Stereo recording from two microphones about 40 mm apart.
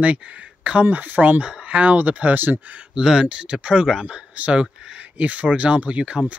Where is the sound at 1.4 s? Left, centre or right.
Right.